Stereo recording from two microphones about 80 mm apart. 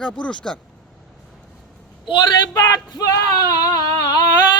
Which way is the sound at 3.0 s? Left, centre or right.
Left.